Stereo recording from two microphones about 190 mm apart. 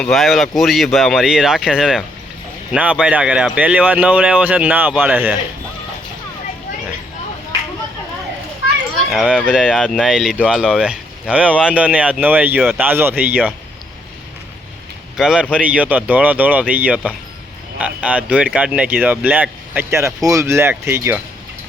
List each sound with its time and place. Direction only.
0.0 s speech: centre (ahead or behind)
9.0 s speech: 5° right (ahead or behind)
15.2 s speech: 5° right (ahead or behind)